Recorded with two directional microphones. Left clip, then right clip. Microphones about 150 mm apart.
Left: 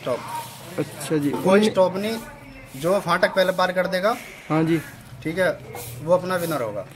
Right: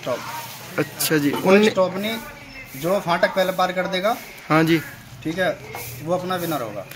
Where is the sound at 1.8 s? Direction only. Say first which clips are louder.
Left 1 dB; 45° left (ahead or behind).